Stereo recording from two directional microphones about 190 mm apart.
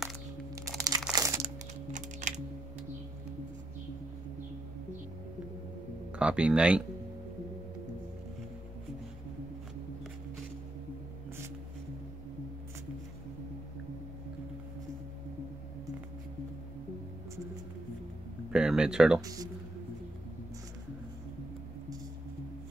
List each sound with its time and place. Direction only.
0.7 s music: 20° right (ahead or behind)
1.9 s typing: 40° right (ahead or behind)
6.1 s speech: 5° right (ahead or behind)
18.5 s a sound: 5° right (ahead or behind)
19.2 s speech: 20° right (ahead or behind)